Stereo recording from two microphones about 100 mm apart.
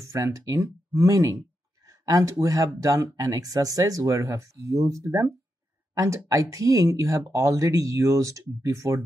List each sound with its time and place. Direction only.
0.0 s speech: 30° right (ahead or behind)